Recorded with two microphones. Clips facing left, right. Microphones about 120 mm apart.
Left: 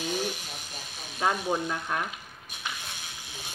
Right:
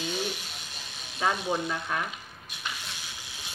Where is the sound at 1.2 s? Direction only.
15° left (ahead or behind).